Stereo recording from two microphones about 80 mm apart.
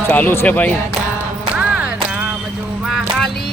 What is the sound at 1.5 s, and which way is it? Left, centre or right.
Music, centre.